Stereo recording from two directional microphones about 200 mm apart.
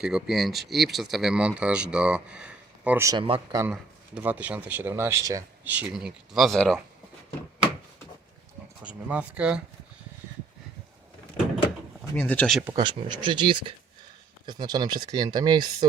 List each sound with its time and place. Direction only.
0.0 s speech: centre (ahead or behind); by 3.6 s 25° right (ahead or behind)
3.7 s speech: 5° right (ahead or behind)
8.8 s speech: 5° right (ahead or behind)
12.1 s speech: 10° left (ahead or behind)
12.6 s speech: 20° right (ahead or behind)